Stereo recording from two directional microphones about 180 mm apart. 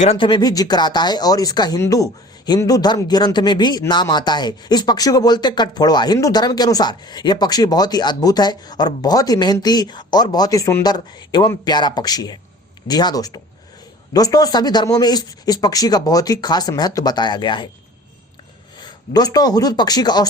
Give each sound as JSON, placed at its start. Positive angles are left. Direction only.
{"t": 0.0, "sound": "speech", "side_deg": 30}
{"t": 18.8, "sound": "speech", "side_deg": 20}